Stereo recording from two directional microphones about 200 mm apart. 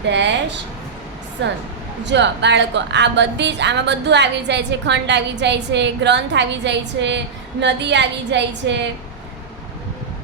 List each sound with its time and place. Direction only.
0.1 s a woman's voice: 60° right (ahead or behind)